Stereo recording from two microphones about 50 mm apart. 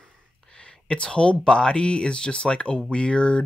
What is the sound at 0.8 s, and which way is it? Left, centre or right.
Speech, left.